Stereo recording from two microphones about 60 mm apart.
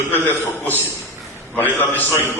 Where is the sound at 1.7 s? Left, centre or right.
Left.